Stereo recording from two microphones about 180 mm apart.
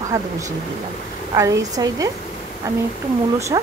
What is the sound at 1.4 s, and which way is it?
Speech, 20° right (ahead or behind).